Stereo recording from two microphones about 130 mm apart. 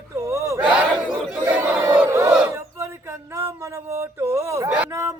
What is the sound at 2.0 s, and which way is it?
Crowd, 20° right (ahead or behind).